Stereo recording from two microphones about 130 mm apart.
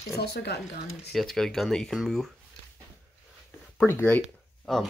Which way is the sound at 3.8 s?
15° left (ahead or behind).